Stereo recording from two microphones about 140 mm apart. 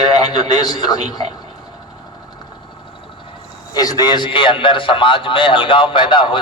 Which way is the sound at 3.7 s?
25° left (ahead or behind).